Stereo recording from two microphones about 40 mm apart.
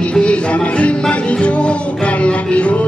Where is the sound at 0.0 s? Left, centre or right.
Left.